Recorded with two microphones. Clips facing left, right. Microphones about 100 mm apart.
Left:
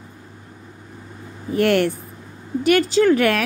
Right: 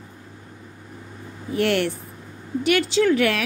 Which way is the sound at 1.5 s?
45° left (ahead or behind).